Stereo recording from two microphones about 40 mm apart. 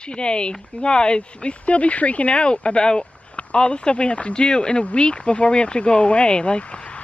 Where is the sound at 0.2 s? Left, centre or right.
Left.